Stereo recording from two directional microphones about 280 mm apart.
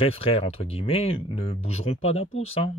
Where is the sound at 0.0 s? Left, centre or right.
Centre.